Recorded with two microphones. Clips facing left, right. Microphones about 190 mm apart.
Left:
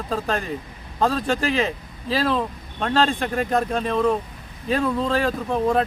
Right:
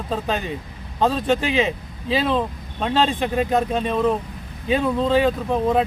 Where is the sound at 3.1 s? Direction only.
20° right (ahead or behind).